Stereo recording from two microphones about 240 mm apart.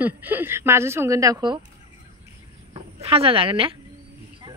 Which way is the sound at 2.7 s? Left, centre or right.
Right.